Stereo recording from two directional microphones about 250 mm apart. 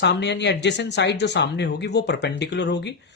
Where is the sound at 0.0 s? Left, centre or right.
Left.